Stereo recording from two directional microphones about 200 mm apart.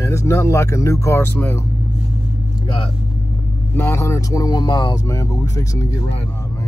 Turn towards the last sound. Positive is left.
turn(degrees=15)  # may be behind; listen again after turning